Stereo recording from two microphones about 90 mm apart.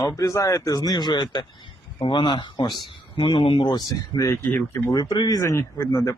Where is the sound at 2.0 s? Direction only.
70° left (ahead or behind).